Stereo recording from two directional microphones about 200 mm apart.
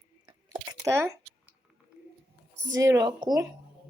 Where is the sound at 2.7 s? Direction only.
15° right (ahead or behind).